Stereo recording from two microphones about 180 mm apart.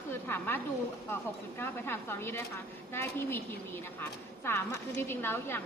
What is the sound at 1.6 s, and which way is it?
Speech, 10° left (ahead or behind).